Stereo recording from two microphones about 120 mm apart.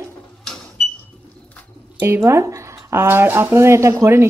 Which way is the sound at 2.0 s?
25° right (ahead or behind).